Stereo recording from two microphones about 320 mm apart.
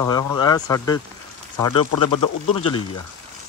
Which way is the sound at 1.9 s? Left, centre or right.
Left.